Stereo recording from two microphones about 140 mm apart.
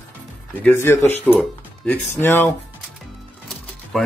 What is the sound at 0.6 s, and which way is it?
Speech, 20° left (ahead or behind).